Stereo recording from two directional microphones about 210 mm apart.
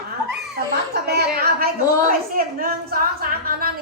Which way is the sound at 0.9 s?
50° right (ahead or behind).